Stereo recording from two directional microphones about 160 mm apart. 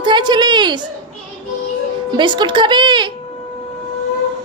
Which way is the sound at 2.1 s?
30° right (ahead or behind).